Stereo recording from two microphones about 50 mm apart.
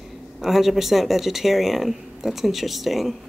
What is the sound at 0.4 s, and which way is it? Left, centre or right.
Speech, centre.